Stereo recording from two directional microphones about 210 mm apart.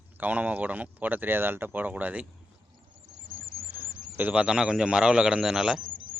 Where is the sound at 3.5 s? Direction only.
45° right (ahead or behind).